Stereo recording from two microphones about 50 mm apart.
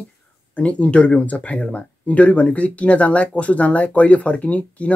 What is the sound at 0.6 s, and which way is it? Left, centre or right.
Speech, left.